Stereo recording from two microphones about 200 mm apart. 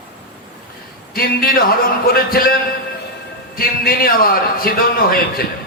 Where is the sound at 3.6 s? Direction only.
45° left (ahead or behind).